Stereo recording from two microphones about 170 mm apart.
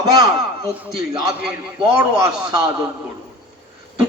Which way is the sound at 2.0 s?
20° right (ahead or behind).